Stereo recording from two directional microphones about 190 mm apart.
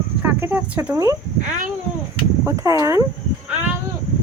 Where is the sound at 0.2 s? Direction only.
10° right (ahead or behind).